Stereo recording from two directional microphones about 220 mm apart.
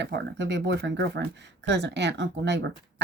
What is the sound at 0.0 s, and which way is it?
Speech, 50° right (ahead or behind).